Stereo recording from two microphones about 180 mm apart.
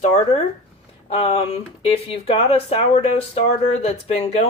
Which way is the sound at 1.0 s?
35° left (ahead or behind).